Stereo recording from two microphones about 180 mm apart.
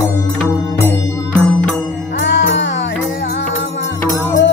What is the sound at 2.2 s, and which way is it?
Music, 90° left.